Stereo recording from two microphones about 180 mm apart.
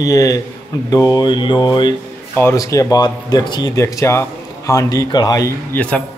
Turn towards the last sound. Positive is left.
turn(degrees=20)  # may be behind; listen again after turning